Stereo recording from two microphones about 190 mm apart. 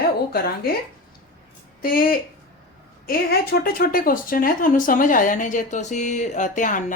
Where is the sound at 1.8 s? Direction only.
50° left (ahead or behind).